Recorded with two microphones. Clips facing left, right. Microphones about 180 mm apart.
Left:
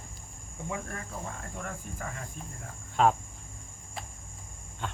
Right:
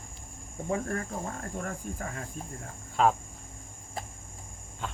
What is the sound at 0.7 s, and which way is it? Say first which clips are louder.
Speech: right 7 dB; 40° right (ahead or behind).